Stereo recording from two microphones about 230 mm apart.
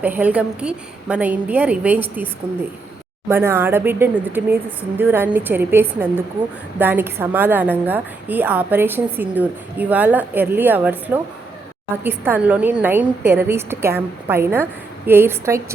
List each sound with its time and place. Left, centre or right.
0.0 s a woman's voice: centre